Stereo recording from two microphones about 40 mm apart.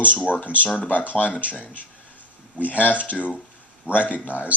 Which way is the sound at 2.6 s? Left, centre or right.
Left.